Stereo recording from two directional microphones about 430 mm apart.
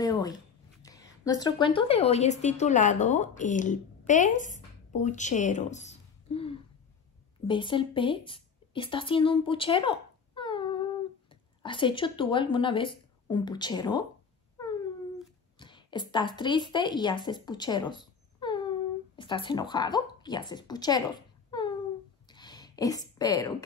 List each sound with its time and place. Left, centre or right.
0.0 s shuffling cards: centre
1.2 s a woman's voice: centre
15.6 s a woman's voice: centre
21.5 s a sound: centre